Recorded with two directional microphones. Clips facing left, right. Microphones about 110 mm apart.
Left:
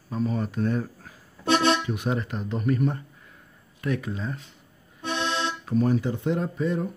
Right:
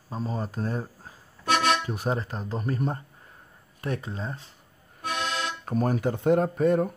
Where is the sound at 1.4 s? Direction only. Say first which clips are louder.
Left 2 dB; 30° left (ahead or behind).